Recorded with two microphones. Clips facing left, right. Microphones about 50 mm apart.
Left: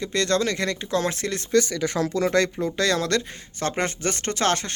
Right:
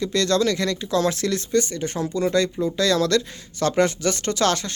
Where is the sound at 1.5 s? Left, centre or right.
Left.